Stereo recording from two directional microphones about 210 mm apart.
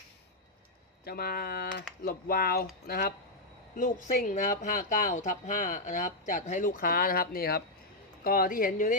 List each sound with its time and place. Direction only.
1.0 s speech: 45° left (ahead or behind)